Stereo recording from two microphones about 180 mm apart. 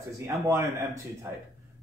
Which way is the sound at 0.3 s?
15° right (ahead or behind).